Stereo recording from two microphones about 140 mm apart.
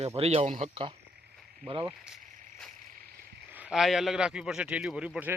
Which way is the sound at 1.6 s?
40° right (ahead or behind).